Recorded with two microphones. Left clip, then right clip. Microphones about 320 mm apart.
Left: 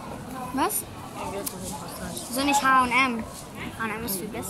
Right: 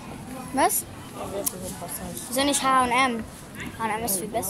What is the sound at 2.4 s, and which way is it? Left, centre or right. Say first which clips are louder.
A woman's voice: left 1 dB; right.